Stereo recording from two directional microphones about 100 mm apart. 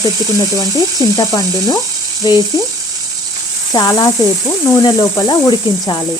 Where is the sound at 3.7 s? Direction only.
40° left (ahead or behind).